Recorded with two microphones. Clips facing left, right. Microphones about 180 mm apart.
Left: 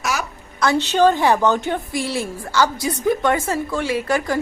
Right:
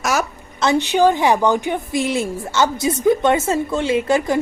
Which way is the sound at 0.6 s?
15° right (ahead or behind).